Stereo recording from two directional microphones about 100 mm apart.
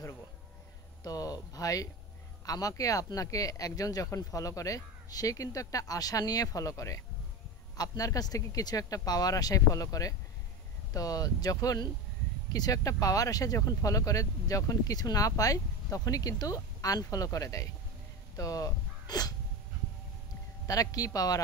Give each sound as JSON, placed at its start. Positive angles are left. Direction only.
{"t": 1.0, "sound": "speech", "side_deg": 40}
{"t": 20.6, "sound": "speech", "side_deg": 35}